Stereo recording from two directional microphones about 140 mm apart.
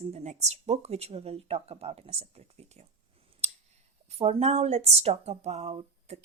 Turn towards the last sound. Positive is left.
turn(degrees=-50)  # may be behind; listen again after turning